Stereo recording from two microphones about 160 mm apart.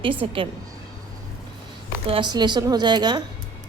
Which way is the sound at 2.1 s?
30° right (ahead or behind).